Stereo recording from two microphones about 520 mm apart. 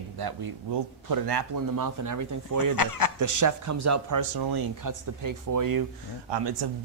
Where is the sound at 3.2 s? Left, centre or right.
Right.